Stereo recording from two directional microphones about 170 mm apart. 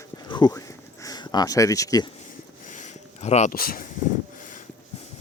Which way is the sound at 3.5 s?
60° left (ahead or behind).